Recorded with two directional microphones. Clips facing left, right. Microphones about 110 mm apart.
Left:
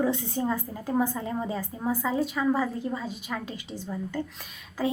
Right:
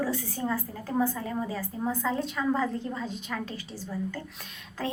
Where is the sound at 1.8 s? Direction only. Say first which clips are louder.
Left 2 dB; 10° left (ahead or behind).